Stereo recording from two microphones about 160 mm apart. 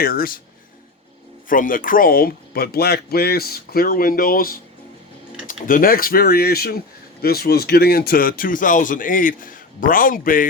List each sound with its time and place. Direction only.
0.0 s speech: 65° left (ahead or behind)
1.5 s speech: 60° left (ahead or behind)
5.6 s speech: 60° left (ahead or behind)